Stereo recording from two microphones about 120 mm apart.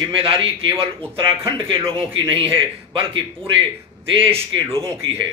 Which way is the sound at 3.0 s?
50° right (ahead or behind).